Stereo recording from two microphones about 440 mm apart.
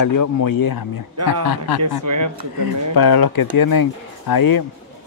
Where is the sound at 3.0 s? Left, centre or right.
Left.